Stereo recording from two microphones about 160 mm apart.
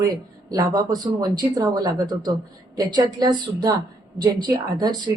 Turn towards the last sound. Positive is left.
turn(degrees=-25)  # may be behind; listen again after turning